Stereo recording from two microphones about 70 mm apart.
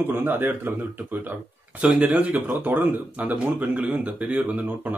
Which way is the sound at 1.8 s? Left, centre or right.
Centre.